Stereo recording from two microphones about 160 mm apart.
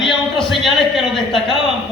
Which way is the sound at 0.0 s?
Centre (ahead or behind).